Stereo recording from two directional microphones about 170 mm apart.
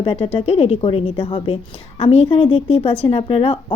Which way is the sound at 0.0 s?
30° left (ahead or behind).